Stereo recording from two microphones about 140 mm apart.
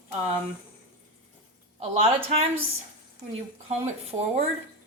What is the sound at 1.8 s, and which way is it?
Speech, 55° right (ahead or behind).